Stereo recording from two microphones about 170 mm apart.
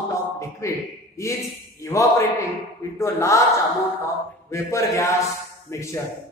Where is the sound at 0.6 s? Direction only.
15° left (ahead or behind).